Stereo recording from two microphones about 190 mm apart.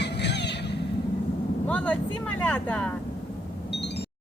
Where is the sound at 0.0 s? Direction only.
60° left (ahead or behind).